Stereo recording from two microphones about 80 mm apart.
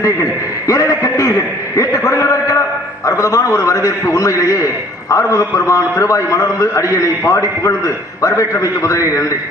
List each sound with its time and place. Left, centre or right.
0.7 s a man's voice: left